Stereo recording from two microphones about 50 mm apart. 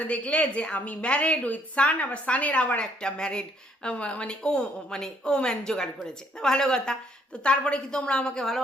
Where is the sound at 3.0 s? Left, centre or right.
Centre.